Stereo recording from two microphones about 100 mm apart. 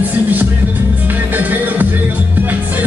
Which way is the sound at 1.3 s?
20° right (ahead or behind).